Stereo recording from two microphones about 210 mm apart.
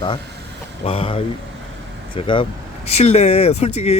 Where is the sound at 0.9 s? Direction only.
25° left (ahead or behind).